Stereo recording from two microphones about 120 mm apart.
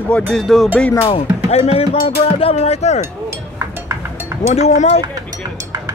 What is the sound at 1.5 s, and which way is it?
Speech, 55° left (ahead or behind).